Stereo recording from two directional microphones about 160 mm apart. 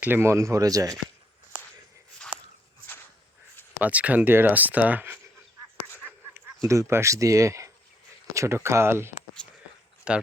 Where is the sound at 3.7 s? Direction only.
10° right (ahead or behind).